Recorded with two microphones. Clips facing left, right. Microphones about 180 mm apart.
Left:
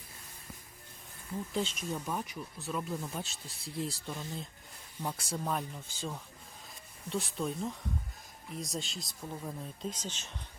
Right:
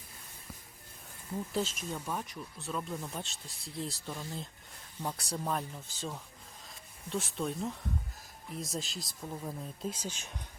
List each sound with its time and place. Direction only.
1.5 s speech: centre (ahead or behind)